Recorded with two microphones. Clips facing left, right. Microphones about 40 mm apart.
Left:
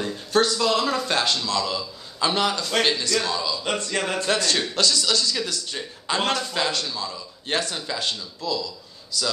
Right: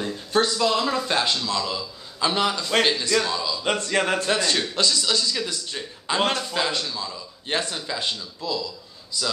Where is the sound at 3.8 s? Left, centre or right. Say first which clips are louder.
Right 3 dB; centre.